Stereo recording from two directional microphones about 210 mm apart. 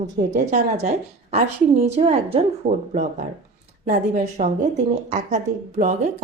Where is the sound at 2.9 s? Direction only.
40° right (ahead or behind).